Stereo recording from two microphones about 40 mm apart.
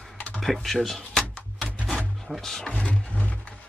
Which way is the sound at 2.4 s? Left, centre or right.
Centre.